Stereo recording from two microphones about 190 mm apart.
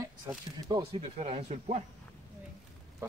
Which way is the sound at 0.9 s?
30° right (ahead or behind).